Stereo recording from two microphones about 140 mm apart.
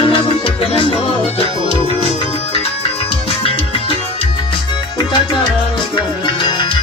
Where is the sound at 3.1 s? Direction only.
40° left (ahead or behind).